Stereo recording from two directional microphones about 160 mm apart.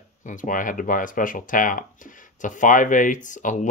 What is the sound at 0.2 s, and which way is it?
Speech, 55° left (ahead or behind).